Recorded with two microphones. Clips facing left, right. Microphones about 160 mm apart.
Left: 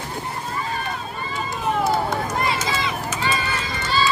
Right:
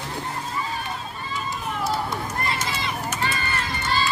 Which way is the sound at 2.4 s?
90° left.